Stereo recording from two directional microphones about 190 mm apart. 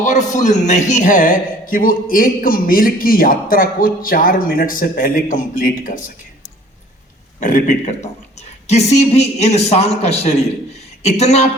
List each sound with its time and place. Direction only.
0.0 s a man's voice: 40° left (ahead or behind)
7.3 s a man's voice: 40° left (ahead or behind)